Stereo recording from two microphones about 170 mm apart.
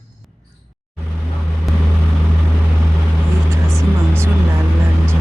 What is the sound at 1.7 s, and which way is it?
Vehicle, centre (ahead or behind).